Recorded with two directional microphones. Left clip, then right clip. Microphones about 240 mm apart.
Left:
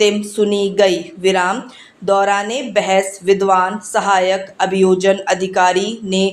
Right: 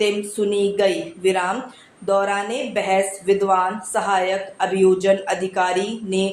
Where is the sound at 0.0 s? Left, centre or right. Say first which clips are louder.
Left 6 dB; left.